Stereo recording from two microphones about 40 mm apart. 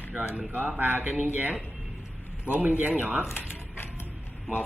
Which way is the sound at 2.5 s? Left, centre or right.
Right.